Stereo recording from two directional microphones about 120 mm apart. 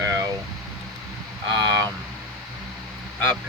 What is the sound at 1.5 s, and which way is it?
Speech, 35° right (ahead or behind).